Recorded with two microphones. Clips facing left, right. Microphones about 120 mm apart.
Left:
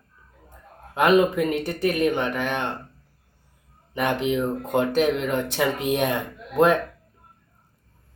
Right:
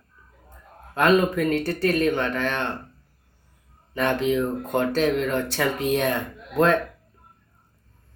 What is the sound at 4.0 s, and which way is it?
Speech, 15° left (ahead or behind).